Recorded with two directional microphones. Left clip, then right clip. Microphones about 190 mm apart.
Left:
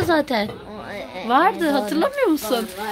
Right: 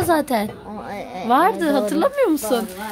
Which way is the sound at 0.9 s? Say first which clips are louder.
Right 1 dB; 60° right (ahead or behind).